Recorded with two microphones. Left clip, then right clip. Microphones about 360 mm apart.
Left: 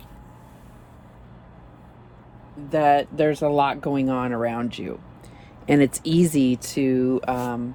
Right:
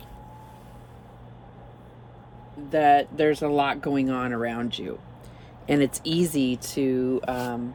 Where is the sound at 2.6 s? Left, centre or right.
Centre.